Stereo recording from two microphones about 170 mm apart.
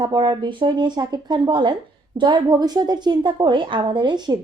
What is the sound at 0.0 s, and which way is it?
A woman's voice, 25° right (ahead or behind).